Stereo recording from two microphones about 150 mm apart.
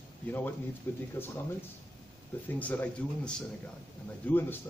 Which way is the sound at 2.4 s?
10° left (ahead or behind).